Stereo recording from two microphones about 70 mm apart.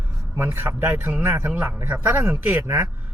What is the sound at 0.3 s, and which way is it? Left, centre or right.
Speech, right.